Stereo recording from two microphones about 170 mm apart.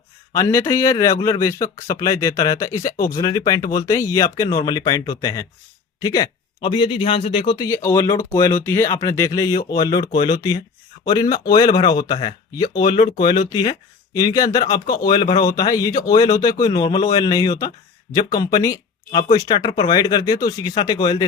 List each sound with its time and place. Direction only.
0.3 s speech: 15° left (ahead or behind)
7.7 s speech: 15° left (ahead or behind)